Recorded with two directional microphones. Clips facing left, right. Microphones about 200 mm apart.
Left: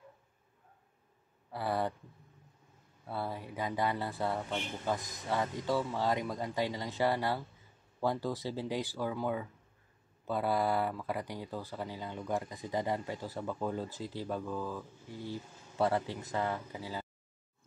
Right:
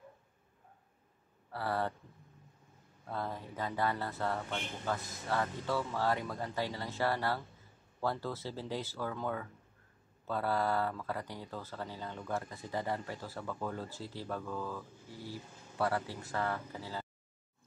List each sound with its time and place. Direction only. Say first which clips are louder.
1.5 s speech: left 2 dB; 15° left (ahead or behind)
3.1 s speech: left 1 dB; 10° left (ahead or behind)
15.8 s speech: left 3 dB; 20° left (ahead or behind)